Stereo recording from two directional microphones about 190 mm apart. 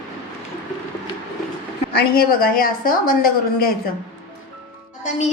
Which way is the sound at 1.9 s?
55° left (ahead or behind).